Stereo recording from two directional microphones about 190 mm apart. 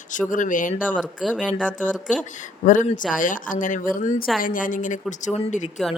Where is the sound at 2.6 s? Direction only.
40° left (ahead or behind).